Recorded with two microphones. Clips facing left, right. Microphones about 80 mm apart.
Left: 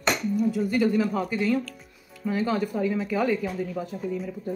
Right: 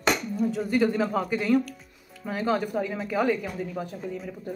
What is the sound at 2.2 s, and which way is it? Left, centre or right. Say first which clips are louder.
Speech: even; right.